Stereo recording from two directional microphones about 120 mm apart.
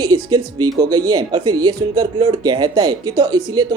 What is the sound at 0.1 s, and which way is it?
Speech, 35° right (ahead or behind).